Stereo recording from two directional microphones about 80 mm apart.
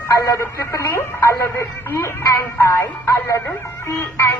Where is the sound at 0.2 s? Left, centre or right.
Left.